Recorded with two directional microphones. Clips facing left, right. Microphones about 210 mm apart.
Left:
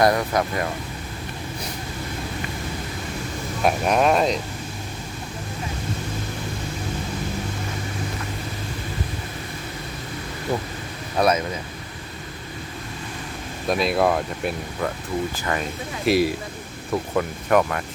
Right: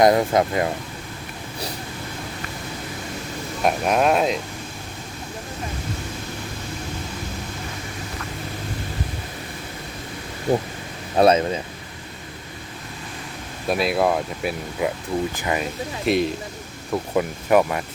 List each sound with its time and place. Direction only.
0.0 s speech: 25° right (ahead or behind)
3.6 s speech: centre (ahead or behind)
11.2 s speech: 30° right (ahead or behind)
13.7 s speech: 5° right (ahead or behind)
15.4 s speech: 15° right (ahead or behind)
16.0 s speech: 5° left (ahead or behind)
16.9 s speech: 10° right (ahead or behind)